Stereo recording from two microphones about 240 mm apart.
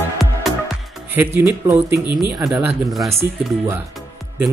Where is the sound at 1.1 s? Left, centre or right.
Centre.